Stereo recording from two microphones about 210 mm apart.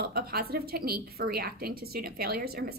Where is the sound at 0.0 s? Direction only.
45° right (ahead or behind).